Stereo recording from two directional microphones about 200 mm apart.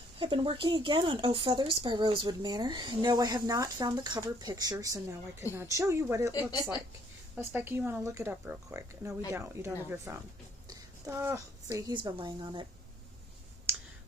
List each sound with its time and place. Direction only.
0.2 s speech: 25° right (ahead or behind)
7.3 s a woman's voice: 10° right (ahead or behind)